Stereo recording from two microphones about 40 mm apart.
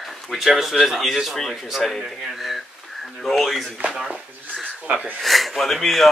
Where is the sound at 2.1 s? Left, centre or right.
Centre.